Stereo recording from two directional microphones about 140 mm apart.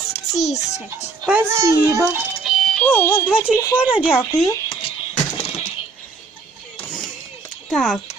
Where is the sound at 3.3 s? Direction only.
10° right (ahead or behind).